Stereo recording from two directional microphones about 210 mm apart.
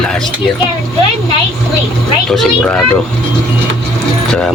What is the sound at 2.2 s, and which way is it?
Speech, centre (ahead or behind).